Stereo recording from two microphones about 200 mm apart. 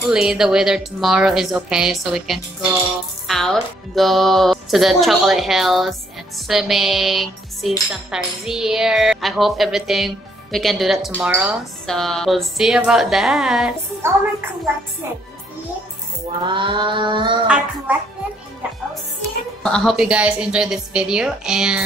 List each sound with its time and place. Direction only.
0.1 s a woman's voice: 5° right (ahead or behind)
16.4 s a sound: 25° right (ahead or behind)
19.6 s a woman's voice: centre (ahead or behind)